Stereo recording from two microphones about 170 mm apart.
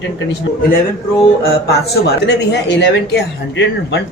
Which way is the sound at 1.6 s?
75° left (ahead or behind).